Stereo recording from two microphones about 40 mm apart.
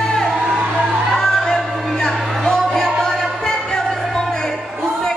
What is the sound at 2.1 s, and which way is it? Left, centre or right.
Music, centre.